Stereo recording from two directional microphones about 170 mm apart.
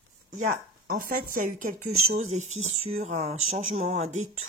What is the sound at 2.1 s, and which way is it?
Speech, 40° right (ahead or behind).